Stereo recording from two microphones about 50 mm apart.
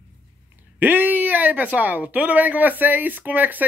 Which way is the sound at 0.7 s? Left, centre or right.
Right.